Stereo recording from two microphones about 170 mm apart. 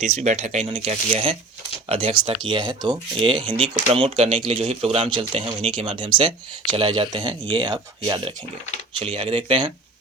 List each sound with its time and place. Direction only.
0.0 s speech: 40° right (ahead or behind)